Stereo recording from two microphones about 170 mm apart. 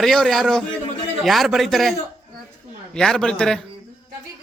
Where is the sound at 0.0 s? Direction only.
Centre (ahead or behind).